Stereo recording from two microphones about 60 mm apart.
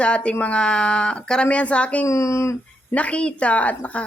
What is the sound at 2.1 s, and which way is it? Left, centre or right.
Speech, left.